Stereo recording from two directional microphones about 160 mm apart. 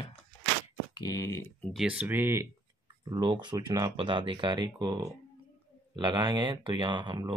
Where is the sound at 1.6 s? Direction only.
Centre (ahead or behind).